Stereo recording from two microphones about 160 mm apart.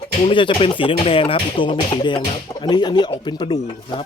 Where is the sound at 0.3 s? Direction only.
35° left (ahead or behind).